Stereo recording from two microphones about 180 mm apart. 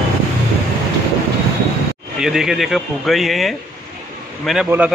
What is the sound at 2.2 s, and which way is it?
A man's voice, centre (ahead or behind).